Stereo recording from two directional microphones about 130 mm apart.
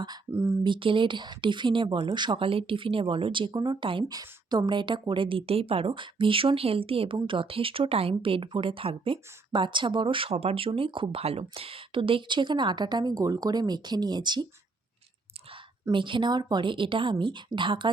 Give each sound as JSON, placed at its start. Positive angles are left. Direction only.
{"t": 0.3, "sound": "speech", "side_deg": -20}
{"t": 0.6, "sound": "speech", "side_deg": -40}
{"t": 15.9, "sound": "speech", "side_deg": -40}